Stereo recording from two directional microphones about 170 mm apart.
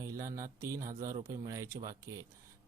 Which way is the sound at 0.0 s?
20° right (ahead or behind).